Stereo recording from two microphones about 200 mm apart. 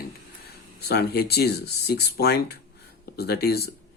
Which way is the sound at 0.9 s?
50° left (ahead or behind).